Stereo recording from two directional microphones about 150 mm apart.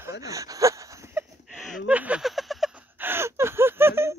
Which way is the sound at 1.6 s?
Centre (ahead or behind).